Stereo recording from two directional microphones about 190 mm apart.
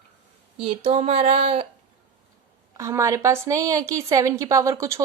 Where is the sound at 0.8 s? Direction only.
35° right (ahead or behind).